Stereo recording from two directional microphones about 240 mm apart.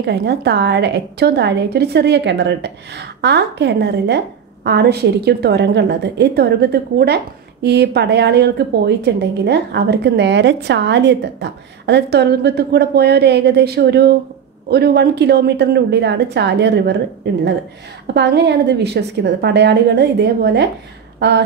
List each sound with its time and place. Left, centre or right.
0.0 s a woman's voice: right
18.0 s a woman's voice: right